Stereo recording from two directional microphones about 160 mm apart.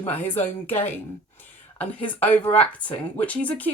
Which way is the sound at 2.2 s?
10° left (ahead or behind).